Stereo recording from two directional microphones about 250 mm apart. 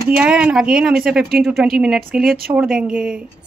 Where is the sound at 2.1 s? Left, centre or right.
Right.